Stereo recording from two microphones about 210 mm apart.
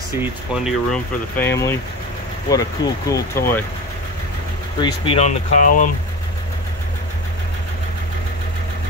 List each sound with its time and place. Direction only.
0.2 s speech: 5° right (ahead or behind)
1.4 s speech: 10° left (ahead or behind)
4.7 s speech: 20° left (ahead or behind); by 5.9 s 40° left (ahead or behind)